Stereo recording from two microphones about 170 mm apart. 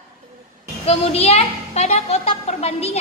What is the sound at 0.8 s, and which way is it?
A child's voice, 35° left (ahead or behind).